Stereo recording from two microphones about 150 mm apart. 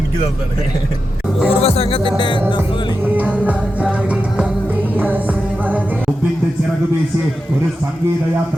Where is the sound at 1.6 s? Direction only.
40° left (ahead or behind).